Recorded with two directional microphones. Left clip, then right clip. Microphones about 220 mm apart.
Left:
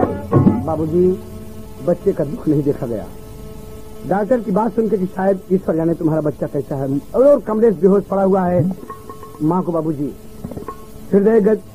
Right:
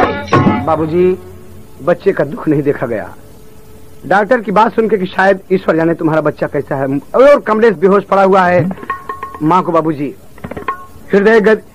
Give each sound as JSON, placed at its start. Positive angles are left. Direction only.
{"t": 0.0, "sound": "music", "side_deg": -35}
{"t": 1.9, "sound": "a man's voice", "side_deg": -45}
{"t": 4.1, "sound": "a man's voice", "side_deg": -45}
{"t": 10.5, "sound": "tabla", "side_deg": -40}